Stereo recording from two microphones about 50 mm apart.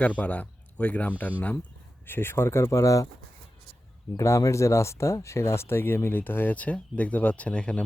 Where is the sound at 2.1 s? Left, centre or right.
Left.